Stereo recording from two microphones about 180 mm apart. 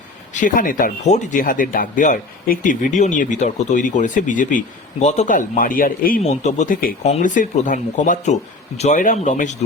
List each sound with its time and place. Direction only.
0.3 s speech: 45° left (ahead or behind)
6.3 s speech: 40° left (ahead or behind)